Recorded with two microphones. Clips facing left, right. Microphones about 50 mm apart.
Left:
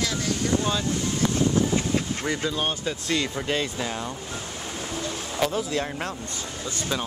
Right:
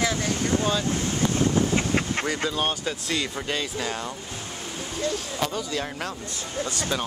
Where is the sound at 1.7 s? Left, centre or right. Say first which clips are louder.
Right 1 dB; right.